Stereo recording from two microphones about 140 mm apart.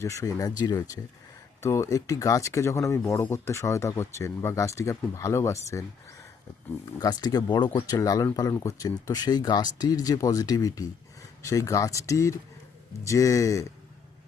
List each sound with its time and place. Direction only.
0.0 s speech: 25° left (ahead or behind)
7.0 s speech: 30° left (ahead or behind)
7.9 s speech: 25° left (ahead or behind)